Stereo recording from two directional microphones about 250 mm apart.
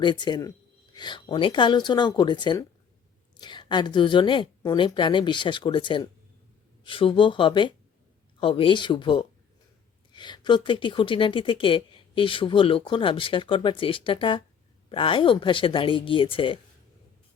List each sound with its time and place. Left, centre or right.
0.0 s speech: centre